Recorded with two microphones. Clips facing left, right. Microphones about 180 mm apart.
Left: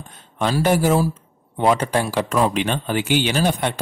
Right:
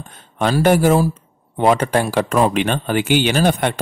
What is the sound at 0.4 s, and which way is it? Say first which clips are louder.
Speech: right 4 dB; 60° right (ahead or behind).